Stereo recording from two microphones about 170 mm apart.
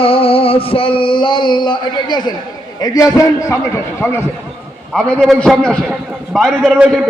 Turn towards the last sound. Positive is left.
turn(degrees=0)  # may be behind; listen again after turning